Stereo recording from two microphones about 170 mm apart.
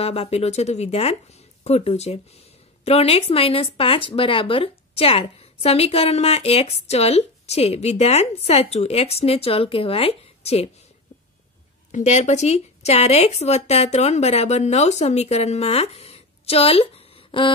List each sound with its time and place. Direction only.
0.0 s speech: 35° left (ahead or behind)
11.9 s speech: 40° left (ahead or behind)